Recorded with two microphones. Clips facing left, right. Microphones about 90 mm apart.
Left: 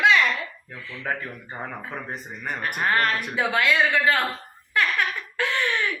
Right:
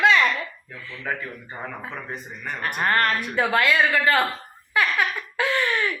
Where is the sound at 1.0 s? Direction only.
35° left (ahead or behind).